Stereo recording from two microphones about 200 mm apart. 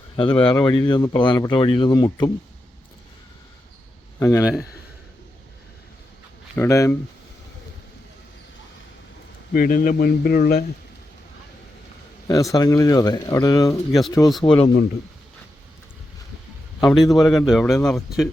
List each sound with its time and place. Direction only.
0.2 s speech: 25° left (ahead or behind)
4.2 s speech: 15° left (ahead or behind)
6.6 s speech: 15° left (ahead or behind)
9.5 s a man's voice: 45° left (ahead or behind)
12.3 s speech: 15° left (ahead or behind)
16.8 s a man's voice: centre (ahead or behind)